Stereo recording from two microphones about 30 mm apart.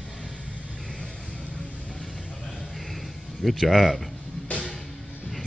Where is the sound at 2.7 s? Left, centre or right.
Centre.